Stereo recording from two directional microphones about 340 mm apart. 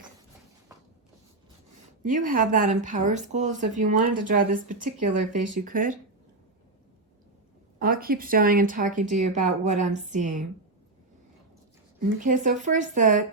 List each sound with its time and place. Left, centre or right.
2.0 s speech: right
7.8 s speech: right
11.9 s speech: right